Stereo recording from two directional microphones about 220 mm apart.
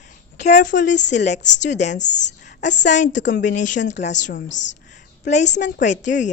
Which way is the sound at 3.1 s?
55° left (ahead or behind).